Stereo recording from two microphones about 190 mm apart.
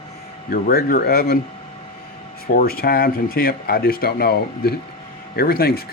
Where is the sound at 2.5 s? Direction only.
50° left (ahead or behind).